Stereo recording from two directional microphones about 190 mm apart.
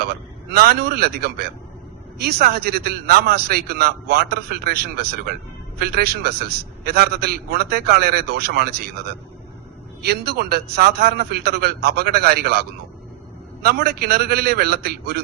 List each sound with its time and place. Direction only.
0.5 s a man's voice: 55° right (ahead or behind)
10.0 s a man's voice: 60° right (ahead or behind)